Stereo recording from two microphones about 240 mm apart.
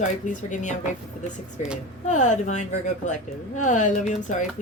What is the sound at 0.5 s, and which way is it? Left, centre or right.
Speech, left.